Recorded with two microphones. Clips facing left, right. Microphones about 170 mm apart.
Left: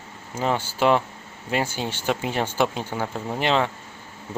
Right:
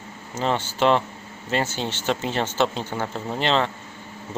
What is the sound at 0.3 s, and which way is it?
Speech, 10° left (ahead or behind).